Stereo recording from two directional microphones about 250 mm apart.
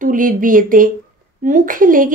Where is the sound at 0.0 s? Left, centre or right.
Right.